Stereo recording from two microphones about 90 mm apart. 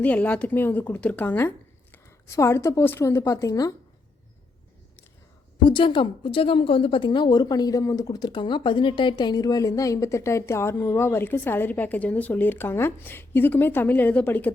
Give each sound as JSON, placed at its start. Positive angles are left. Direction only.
{"t": 0.0, "sound": "a woman's voice", "side_deg": 15}
{"t": 5.6, "sound": "a woman's voice", "side_deg": 65}